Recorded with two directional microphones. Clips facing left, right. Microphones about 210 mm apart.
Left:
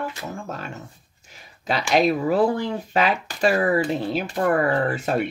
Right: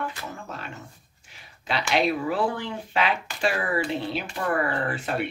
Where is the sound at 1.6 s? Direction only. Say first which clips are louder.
Left 4 dB; 40° left (ahead or behind).